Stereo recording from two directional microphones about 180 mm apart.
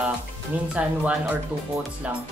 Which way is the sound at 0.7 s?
5° right (ahead or behind).